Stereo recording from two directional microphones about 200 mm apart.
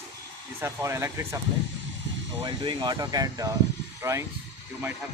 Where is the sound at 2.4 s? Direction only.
20° right (ahead or behind).